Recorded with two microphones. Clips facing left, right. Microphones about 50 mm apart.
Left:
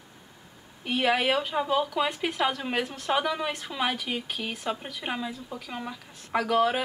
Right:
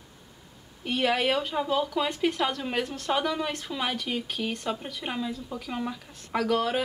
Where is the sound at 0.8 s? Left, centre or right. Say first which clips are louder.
Left 1 dB; centre.